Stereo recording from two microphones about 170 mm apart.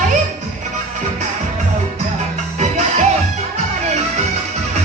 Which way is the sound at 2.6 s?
40° right (ahead or behind).